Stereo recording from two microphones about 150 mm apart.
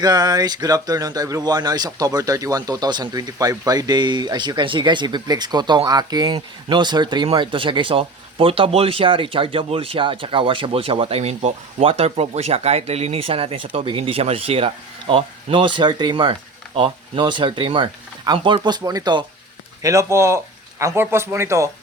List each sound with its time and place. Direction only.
0.0 s speech: 25° right (ahead or behind)